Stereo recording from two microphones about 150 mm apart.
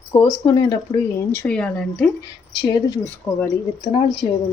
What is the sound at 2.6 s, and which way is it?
Speech, 25° left (ahead or behind).